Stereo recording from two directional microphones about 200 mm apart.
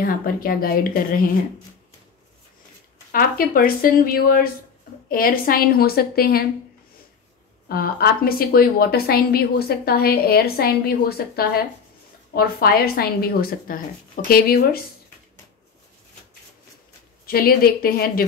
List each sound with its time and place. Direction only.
0.0 s a woman's voice: 45° left (ahead or behind)
3.1 s a woman's voice: 45° left (ahead or behind)
7.6 s a woman's voice: 50° left (ahead or behind)
17.3 s a woman's voice: 50° left (ahead or behind)